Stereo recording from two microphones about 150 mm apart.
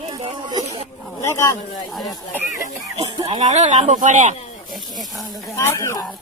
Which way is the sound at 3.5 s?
50° right (ahead or behind).